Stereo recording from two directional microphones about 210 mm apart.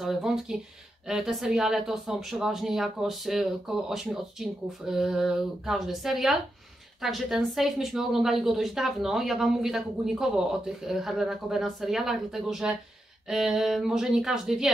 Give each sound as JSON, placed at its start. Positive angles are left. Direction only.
{"t": 0.0, "sound": "a woman's voice", "side_deg": 0}